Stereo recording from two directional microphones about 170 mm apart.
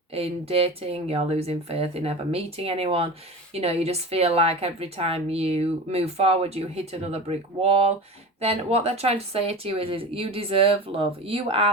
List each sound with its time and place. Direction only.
0.1 s a woman's voice: 35° right (ahead or behind)